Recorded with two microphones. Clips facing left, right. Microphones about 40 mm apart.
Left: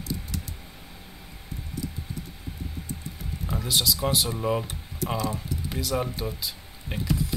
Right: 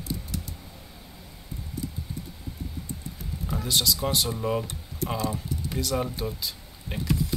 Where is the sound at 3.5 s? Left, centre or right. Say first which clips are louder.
Even; centre.